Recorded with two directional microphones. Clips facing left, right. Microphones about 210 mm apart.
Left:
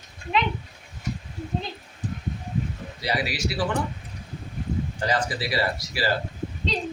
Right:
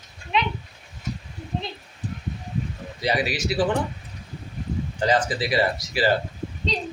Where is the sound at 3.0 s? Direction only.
20° right (ahead or behind).